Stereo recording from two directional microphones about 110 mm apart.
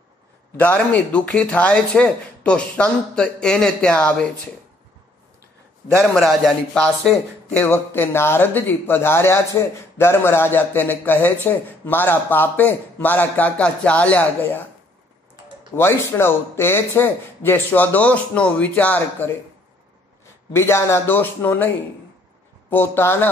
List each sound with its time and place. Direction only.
0.6 s speech: 15° left (ahead or behind)
6.1 s speech: centre (ahead or behind)
7.5 s speech: 20° left (ahead or behind)
15.7 s speech: 20° left (ahead or behind)
20.5 s speech: 25° left (ahead or behind)
22.7 s speech: 20° left (ahead or behind)